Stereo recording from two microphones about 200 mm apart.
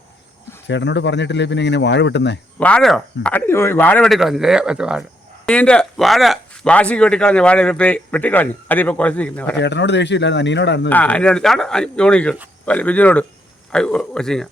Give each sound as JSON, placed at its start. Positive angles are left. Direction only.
{"t": 0.7, "sound": "speech", "side_deg": 60}
{"t": 2.6, "sound": "speech", "side_deg": 5}
{"t": 9.6, "sound": "speech", "side_deg": 60}
{"t": 10.8, "sound": "speech", "side_deg": 10}